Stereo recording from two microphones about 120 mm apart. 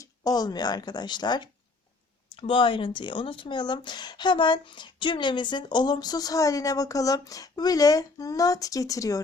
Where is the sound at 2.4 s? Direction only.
45° left (ahead or behind).